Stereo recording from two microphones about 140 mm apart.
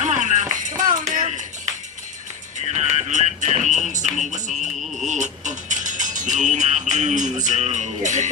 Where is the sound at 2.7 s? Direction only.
50° right (ahead or behind).